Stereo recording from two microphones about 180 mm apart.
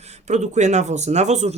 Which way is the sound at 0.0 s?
40° right (ahead or behind).